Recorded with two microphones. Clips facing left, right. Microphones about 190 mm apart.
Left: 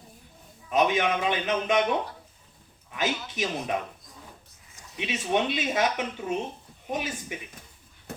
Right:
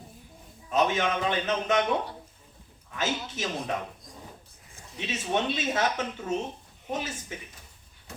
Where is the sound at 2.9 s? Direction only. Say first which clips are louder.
Left 1 dB; 15° left (ahead or behind).